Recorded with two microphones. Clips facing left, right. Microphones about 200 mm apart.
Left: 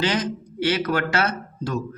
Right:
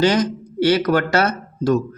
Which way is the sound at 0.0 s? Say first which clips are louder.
Right 7 dB; 40° right (ahead or behind).